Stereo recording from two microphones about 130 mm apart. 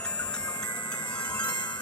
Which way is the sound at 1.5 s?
35° left (ahead or behind).